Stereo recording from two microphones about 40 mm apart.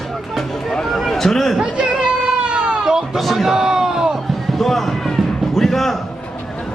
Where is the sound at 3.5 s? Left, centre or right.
Centre.